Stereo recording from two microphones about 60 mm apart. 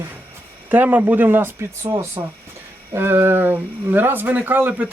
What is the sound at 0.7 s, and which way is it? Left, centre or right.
Speech, right.